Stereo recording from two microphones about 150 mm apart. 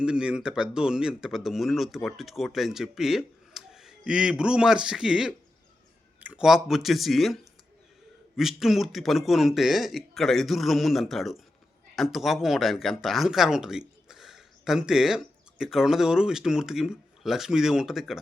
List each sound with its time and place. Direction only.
0.0 s speech: 5° right (ahead or behind)